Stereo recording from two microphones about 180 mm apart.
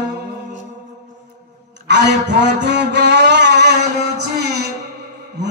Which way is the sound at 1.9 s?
75° right (ahead or behind).